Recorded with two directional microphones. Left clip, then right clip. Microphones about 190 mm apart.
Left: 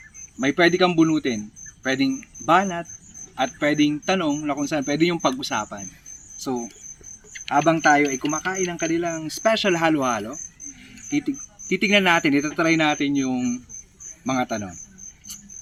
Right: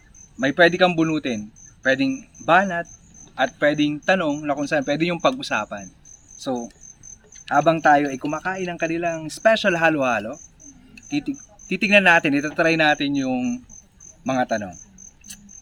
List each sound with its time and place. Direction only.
0.3 s speech: 25° right (ahead or behind)
7.4 s speech: 30° right (ahead or behind)